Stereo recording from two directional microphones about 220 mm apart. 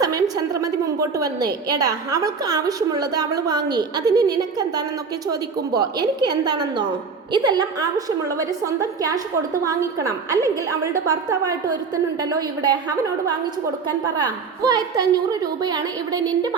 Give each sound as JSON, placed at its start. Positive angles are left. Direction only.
{"t": 0.0, "sound": "a woman's voice", "side_deg": -15}